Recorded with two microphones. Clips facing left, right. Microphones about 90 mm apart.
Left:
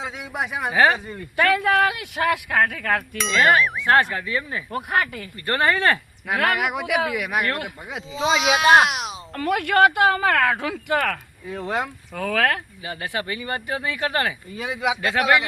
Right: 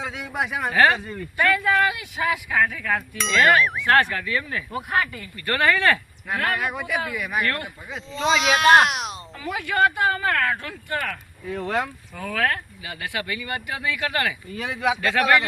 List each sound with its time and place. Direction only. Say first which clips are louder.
0.0 s a sound: even; 15° left (ahead or behind)
0.5 s speech: even; 10° left (ahead or behind)
1.4 s speech: left 2 dB; 65° left (ahead or behind)
3.2 s speech: even; centre (ahead or behind)
3.8 s speech: left 1 dB; 20° left (ahead or behind)
6.2 s speech: left 3 dB; 85° left; by 8.0 s 60° left (ahead or behind)
8.1 s speech: even; centre (ahead or behind)
9.3 s speech: left 7 dB; 65° left (ahead or behind); by 11.2 s 85° left
11.4 s speech: right 1 dB; 15° left (ahead or behind)
12.1 s speech: left 3 dB; 75° left (ahead or behind)
12.8 s speech: left 2 dB; 30° left (ahead or behind)
14.5 s speech: right 2 dB; 15° left (ahead or behind)